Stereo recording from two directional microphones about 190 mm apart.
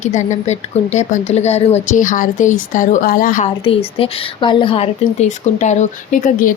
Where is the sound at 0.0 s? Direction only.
40° left (ahead or behind).